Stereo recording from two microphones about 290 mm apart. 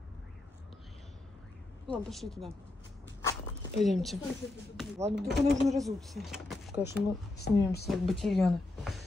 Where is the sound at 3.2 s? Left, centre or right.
Centre.